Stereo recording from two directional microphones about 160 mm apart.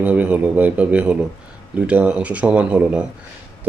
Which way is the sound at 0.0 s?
10° right (ahead or behind).